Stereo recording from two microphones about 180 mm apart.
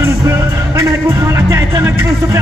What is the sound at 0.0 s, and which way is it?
Music, 15° right (ahead or behind).